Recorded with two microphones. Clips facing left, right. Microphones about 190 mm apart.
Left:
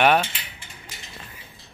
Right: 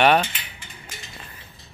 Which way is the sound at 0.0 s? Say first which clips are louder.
Right 1 dB; 5° left (ahead or behind).